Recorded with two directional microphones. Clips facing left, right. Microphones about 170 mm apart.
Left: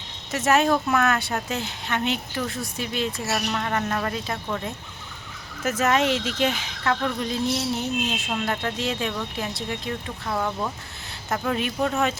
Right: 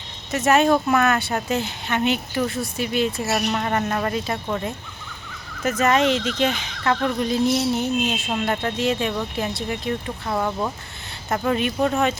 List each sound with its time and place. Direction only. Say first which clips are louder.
0.3 s speech: right 3 dB; centre (ahead or behind)
5.6 s speech: right 3 dB; 5° left (ahead or behind)